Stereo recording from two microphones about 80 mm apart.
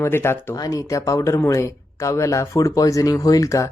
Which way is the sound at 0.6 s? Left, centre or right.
Left.